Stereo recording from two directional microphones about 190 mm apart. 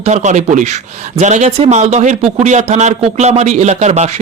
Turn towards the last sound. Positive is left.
turn(degrees=-35)  # may be behind; listen again after turning